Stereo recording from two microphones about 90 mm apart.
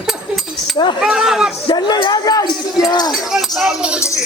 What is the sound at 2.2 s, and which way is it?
Speech, 45° left (ahead or behind).